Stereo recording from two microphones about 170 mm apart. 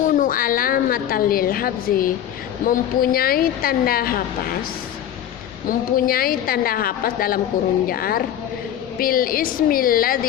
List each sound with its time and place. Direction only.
0.0 s a woman's voice: 50° left (ahead or behind)
5.6 s a woman's voice: 60° left (ahead or behind)